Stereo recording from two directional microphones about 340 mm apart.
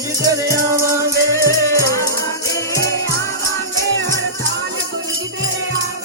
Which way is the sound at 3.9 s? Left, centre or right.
Right.